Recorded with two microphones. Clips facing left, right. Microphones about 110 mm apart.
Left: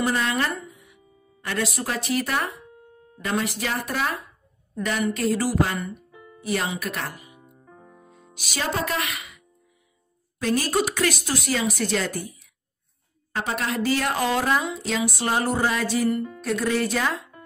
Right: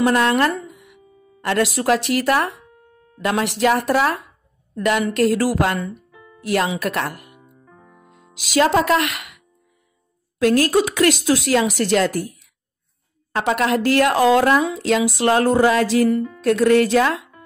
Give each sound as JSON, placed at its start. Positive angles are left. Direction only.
{"t": 0.0, "sound": "a woman's voice", "side_deg": -75}
{"t": 7.4, "sound": "music", "side_deg": 20}
{"t": 8.3, "sound": "a woman's voice", "side_deg": -90}
{"t": 10.4, "sound": "speech", "side_deg": -80}
{"t": 13.3, "sound": "speech", "side_deg": -85}
{"t": 16.4, "sound": "speech", "side_deg": -65}